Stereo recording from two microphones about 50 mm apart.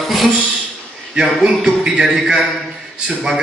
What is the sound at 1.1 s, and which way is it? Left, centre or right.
A man's voice, centre.